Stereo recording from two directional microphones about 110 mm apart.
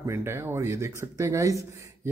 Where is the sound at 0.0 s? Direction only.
25° right (ahead or behind).